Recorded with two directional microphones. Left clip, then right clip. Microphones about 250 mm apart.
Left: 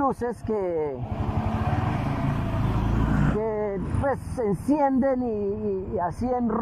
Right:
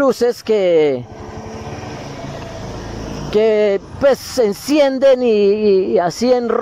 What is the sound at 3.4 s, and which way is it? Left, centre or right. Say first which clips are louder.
Speech: right 19 dB; right.